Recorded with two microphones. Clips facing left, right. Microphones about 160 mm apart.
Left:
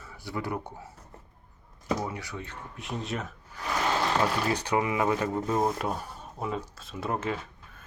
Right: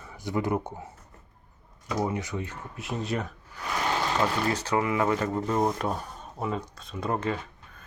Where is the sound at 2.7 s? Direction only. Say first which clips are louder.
Right 3 dB; centre (ahead or behind).